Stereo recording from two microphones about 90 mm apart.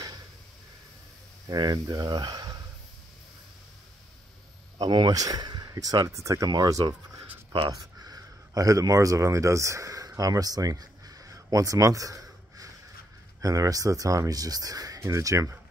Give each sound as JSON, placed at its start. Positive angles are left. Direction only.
{"t": 1.5, "sound": "speech", "side_deg": -45}
{"t": 4.7, "sound": "speech", "side_deg": -55}
{"t": 7.5, "sound": "speech", "side_deg": -55}